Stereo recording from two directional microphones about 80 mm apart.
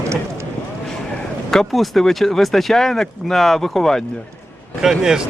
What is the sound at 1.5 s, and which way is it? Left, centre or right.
Speech, centre.